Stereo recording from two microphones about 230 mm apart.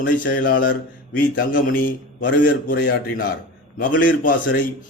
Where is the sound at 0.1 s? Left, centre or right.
Left.